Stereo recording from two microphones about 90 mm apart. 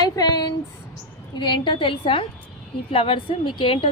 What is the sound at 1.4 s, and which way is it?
Speech, 60° left (ahead or behind).